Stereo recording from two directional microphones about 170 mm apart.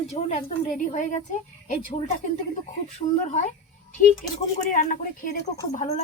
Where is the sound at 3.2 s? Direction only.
45° left (ahead or behind).